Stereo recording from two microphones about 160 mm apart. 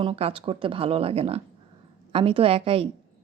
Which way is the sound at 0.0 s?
35° right (ahead or behind).